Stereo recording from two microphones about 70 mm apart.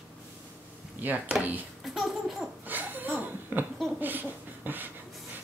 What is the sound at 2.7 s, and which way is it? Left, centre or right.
Laughter, right.